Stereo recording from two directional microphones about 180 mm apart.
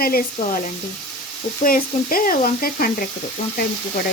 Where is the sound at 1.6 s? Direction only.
50° left (ahead or behind).